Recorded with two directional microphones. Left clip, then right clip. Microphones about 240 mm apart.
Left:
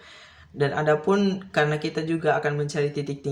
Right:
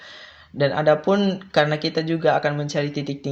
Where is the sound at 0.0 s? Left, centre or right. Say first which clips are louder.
Right 6 dB; right.